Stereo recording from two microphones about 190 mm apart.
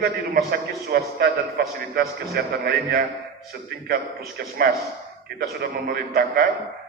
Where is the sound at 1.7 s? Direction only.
55° right (ahead or behind).